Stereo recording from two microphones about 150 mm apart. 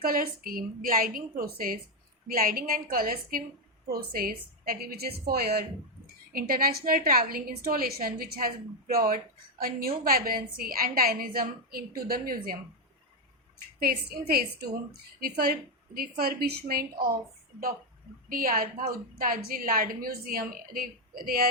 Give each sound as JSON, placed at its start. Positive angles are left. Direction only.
{"t": 0.0, "sound": "a woman's voice", "side_deg": -75}
{"t": 3.8, "sound": "a woman's voice", "side_deg": -90}
{"t": 6.3, "sound": "a woman's voice", "side_deg": -80}
{"t": 13.7, "sound": "a woman's voice", "side_deg": -90}
{"t": 18.3, "sound": "a woman's voice", "side_deg": -70}